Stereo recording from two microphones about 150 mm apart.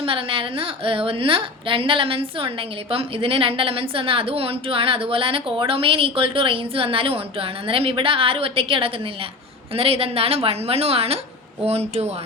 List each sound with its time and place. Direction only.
0.0 s a woman's voice: 35° right (ahead or behind)